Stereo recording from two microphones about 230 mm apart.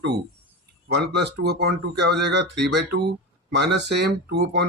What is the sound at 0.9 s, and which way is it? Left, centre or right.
Speech, right.